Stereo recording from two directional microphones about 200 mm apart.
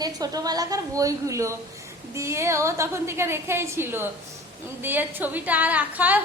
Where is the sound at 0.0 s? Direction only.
20° right (ahead or behind).